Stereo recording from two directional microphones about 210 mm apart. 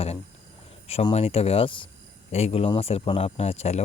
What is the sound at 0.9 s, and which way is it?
Speech, 30° left (ahead or behind).